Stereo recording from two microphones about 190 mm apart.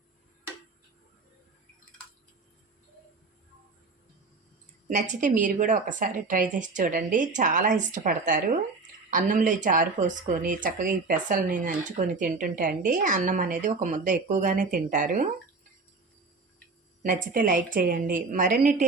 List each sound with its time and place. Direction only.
4.9 s a woman's voice: 40° right (ahead or behind)
17.0 s speech: 45° right (ahead or behind)